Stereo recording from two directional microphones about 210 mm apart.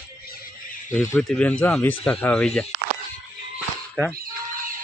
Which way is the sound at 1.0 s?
10° left (ahead or behind).